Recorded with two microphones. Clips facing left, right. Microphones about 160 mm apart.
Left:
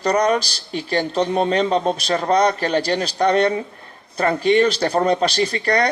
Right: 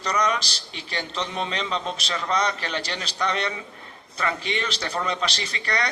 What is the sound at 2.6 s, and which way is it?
A man's voice, 40° left (ahead or behind).